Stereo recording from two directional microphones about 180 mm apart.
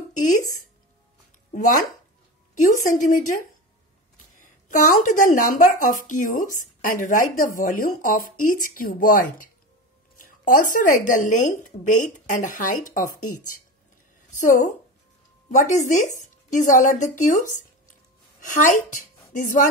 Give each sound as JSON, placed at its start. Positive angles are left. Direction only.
{"t": 0.2, "sound": "a woman's voice", "side_deg": 45}
{"t": 1.5, "sound": "a woman's voice", "side_deg": 45}
{"t": 4.4, "sound": "a woman's voice", "side_deg": 45}